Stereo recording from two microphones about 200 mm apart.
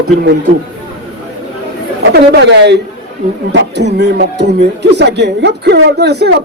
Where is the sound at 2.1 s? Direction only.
60° right (ahead or behind).